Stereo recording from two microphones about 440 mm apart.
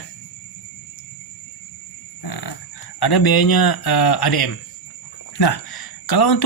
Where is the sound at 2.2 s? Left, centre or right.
Left.